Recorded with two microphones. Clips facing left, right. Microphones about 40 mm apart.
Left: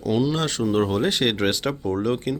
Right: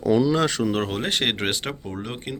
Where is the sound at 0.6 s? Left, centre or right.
Right.